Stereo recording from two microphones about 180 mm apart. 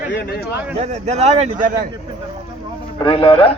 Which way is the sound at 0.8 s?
40° right (ahead or behind).